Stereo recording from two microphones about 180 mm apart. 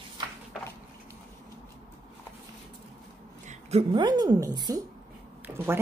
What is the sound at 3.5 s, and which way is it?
A woman's voice, 35° right (ahead or behind).